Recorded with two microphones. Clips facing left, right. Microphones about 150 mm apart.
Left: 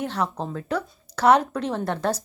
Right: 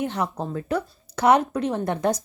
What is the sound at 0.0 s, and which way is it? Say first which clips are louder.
Speech: right 1 dB; 10° right (ahead or behind).